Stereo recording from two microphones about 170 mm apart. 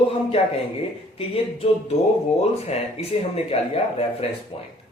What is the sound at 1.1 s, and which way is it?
Speech, 35° left (ahead or behind).